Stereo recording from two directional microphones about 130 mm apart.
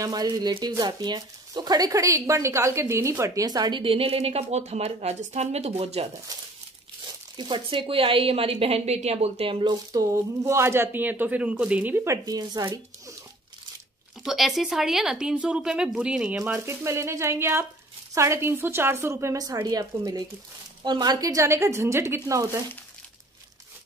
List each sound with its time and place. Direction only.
0.0 s speech: 30° right (ahead or behind); by 6.0 s 50° right (ahead or behind)
7.3 s speech: 35° right (ahead or behind)
10.0 s speech: 25° right (ahead or behind)
14.2 s a woman's voice: centre (ahead or behind)
16.3 s speech: 20° right (ahead or behind)